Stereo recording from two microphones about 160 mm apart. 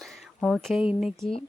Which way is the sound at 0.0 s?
Centre (ahead or behind).